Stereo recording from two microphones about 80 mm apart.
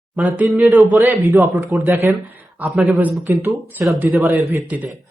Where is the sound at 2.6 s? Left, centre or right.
Right.